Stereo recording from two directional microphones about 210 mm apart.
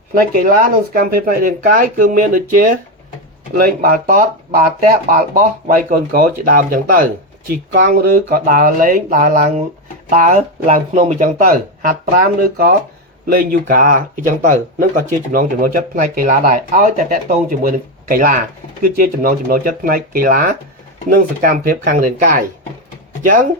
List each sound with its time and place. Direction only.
0.1 s speech: 45° right (ahead or behind)